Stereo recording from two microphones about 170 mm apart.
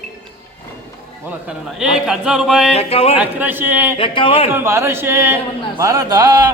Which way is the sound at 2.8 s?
35° left (ahead or behind).